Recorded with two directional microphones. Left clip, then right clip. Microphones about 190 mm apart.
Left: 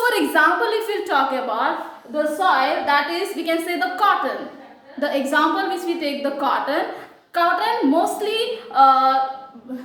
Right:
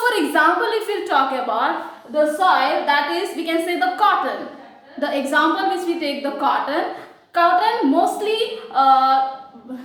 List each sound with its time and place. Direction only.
0.0 s a woman's voice: 20° left (ahead or behind)
2.6 s a woman's voice: 20° left (ahead or behind)